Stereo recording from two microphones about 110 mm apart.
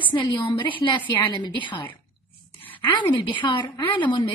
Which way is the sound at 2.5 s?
15° left (ahead or behind).